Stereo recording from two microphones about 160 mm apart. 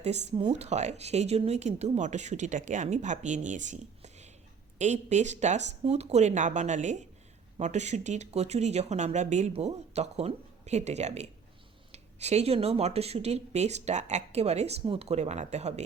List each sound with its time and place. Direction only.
0.0 s speech: 45° right (ahead or behind)